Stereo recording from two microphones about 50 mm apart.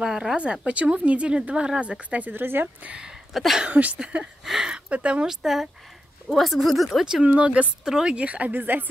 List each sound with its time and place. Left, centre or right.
0.0 s speech: centre
0.4 s speech: right
2.3 s speech: right
3.3 s speech: centre
3.6 s speech: right
4.5 s speech: centre
5.2 s speech: centre
7.2 s speech: right
7.8 s speech: centre; by 8.8 s right